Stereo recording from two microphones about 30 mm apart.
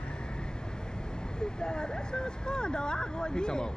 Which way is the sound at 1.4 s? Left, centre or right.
Left.